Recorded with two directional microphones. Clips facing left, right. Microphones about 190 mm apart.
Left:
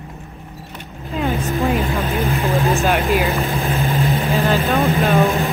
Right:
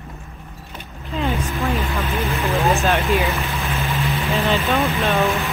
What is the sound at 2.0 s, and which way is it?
Vehicle, 15° left (ahead or behind).